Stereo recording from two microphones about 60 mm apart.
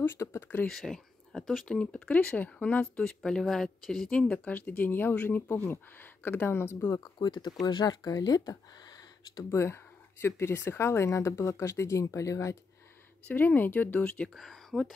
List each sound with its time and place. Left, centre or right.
0.0 s speech: left
0.7 s speech: centre; by 2.9 s left
3.2 s speech: centre
4.1 s speech: centre
4.6 s speech: left
7.6 s speech: left
9.5 s speech: left
13.2 s speech: left
14.3 s speech: centre